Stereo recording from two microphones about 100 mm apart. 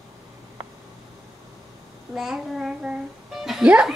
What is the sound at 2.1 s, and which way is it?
Music, 5° right (ahead or behind).